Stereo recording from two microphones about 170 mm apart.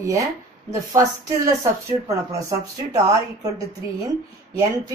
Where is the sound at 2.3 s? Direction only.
20° right (ahead or behind).